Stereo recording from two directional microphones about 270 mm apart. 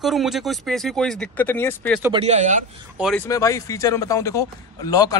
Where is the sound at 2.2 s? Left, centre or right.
Right.